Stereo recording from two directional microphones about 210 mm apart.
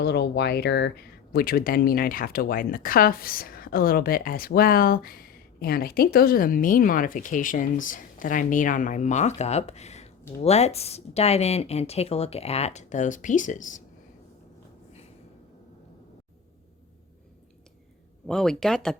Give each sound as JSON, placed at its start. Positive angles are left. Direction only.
{"t": 0.0, "sound": "speech", "side_deg": 50}
{"t": 18.3, "sound": "speech", "side_deg": 5}